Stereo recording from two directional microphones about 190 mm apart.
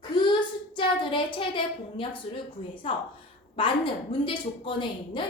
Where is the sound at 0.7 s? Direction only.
25° left (ahead or behind).